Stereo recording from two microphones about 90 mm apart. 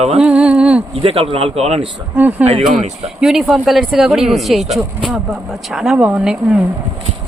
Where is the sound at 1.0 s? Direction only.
90° right.